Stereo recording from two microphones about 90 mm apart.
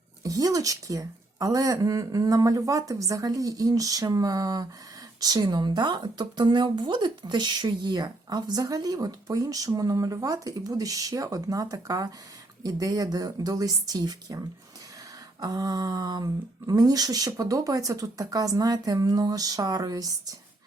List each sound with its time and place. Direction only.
0.2 s a woman's voice: 40° right (ahead or behind)